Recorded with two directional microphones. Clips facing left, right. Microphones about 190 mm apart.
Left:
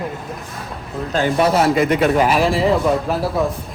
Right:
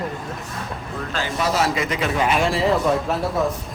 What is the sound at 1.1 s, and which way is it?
Speech, 60° left (ahead or behind).